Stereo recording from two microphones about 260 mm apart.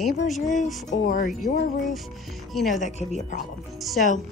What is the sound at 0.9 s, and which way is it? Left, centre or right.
Speech, left.